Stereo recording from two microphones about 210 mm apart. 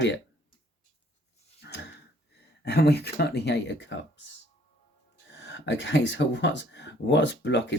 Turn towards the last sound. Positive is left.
turn(degrees=55)  # may be behind; listen again after turning